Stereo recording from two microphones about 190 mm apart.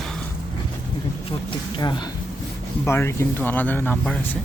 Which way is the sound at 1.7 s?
25° left (ahead or behind).